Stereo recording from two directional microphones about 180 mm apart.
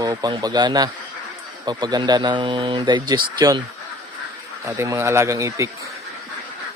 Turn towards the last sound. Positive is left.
turn(degrees=-15)  # may be behind; listen again after turning